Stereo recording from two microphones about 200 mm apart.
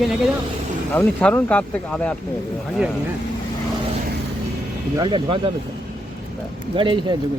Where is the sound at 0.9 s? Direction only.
10° left (ahead or behind).